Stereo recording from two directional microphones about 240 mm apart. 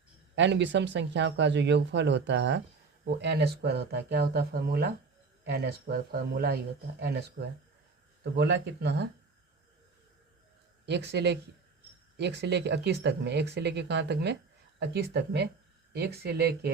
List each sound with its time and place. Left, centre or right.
0.3 s speech: right
10.8 s speech: right